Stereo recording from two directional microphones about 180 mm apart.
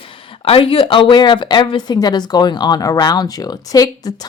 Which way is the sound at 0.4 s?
30° left (ahead or behind).